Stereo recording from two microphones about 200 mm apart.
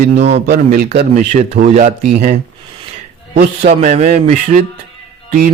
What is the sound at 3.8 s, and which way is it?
Speech, 35° right (ahead or behind).